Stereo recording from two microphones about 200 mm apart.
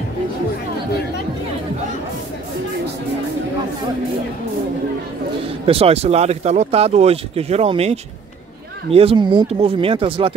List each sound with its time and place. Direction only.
5.7 s speech: 30° right (ahead or behind)